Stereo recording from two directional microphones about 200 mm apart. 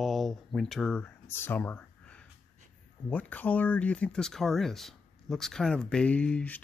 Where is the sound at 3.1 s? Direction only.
5° left (ahead or behind).